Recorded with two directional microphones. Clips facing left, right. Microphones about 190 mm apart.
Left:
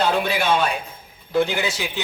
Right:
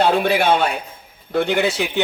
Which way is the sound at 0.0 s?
60° right (ahead or behind).